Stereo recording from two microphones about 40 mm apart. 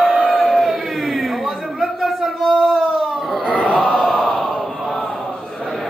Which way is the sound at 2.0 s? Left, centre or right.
Centre.